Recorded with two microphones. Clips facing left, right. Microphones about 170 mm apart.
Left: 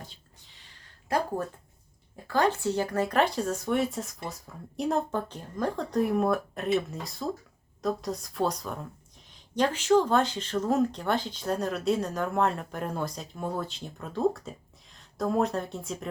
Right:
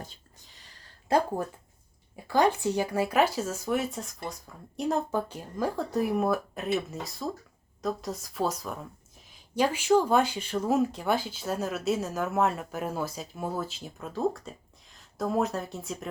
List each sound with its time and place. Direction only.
0.1 s a sound: 40° right (ahead or behind)
1.1 s speech: 25° right (ahead or behind)
2.1 s speech: 15° right (ahead or behind)